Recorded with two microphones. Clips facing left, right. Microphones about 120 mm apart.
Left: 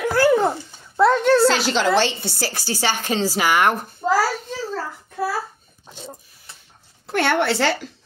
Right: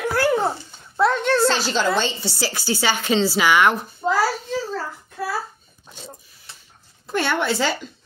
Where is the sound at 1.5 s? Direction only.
90° left; by 4.0 s 50° left (ahead or behind).